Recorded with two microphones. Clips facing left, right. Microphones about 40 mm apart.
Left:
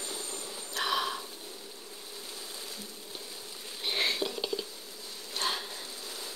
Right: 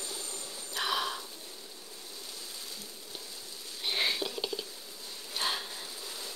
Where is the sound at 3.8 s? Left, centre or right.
Centre.